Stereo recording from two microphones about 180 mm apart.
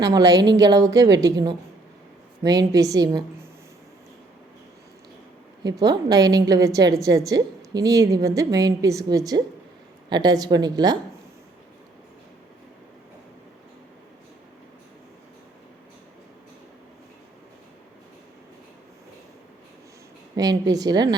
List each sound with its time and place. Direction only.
0.1 s a woman's voice: 20° right (ahead or behind)
5.8 s a woman's voice: 20° right (ahead or behind)
20.3 s a woman's voice: 20° right (ahead or behind)